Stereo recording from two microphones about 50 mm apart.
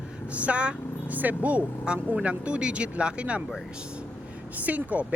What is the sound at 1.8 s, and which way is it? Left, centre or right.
Speech, centre.